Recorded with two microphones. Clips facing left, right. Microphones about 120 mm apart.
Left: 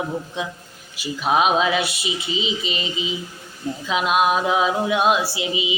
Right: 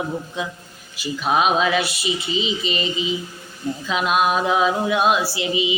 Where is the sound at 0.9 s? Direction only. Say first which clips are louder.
Even; 20° left (ahead or behind).